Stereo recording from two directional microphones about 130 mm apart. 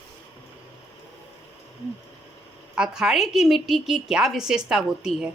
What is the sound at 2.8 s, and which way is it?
A woman's voice, 5° right (ahead or behind).